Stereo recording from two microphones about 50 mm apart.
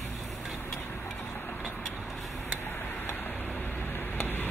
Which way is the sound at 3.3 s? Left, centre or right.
Left.